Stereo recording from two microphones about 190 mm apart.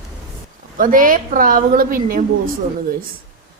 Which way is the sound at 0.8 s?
45° right (ahead or behind).